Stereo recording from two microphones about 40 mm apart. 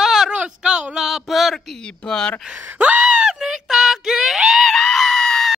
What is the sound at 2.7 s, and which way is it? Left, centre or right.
Gasp, right.